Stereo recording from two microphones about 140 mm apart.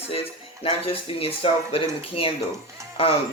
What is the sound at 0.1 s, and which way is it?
Speech, 45° left (ahead or behind).